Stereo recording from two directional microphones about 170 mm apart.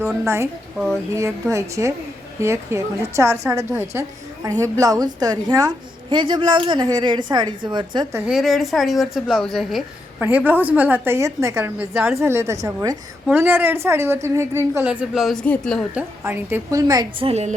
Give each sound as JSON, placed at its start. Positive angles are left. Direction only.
{"t": 0.0, "sound": "a woman's voice", "side_deg": -15}
{"t": 8.3, "sound": "a woman's voice", "side_deg": 0}
{"t": 10.2, "sound": "a woman's voice", "side_deg": -10}
{"t": 14.8, "sound": "a woman's voice", "side_deg": -5}
{"t": 16.0, "sound": "a woman's voice", "side_deg": -10}